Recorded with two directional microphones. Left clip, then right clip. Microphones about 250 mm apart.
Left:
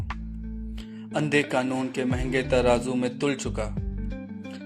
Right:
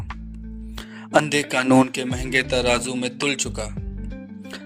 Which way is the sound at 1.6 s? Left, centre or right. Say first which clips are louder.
Right 10 dB; right.